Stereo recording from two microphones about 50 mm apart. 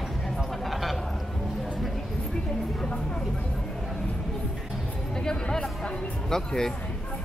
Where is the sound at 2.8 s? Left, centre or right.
Centre.